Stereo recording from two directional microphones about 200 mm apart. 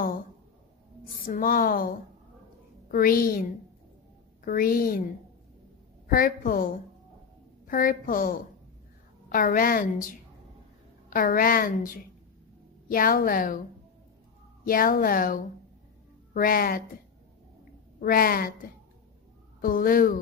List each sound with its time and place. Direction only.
1.2 s a woman's voice: 45° left (ahead or behind)
2.9 s a woman's voice: 45° left (ahead or behind)
4.5 s a woman's voice: 45° left (ahead or behind)
6.0 s a woman's voice: 45° left (ahead or behind)
14.6 s a woman's voice: 45° left (ahead or behind)
18.0 s a woman's voice: 45° left (ahead or behind)